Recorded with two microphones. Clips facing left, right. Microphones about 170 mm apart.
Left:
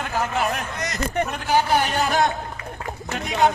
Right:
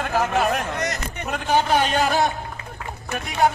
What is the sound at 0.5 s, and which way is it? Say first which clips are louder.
Speech: right 4 dB; 60° right (ahead or behind).